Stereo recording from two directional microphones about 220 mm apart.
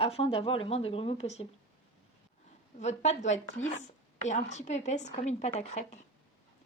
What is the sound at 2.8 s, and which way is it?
A woman's voice, 30° left (ahead or behind).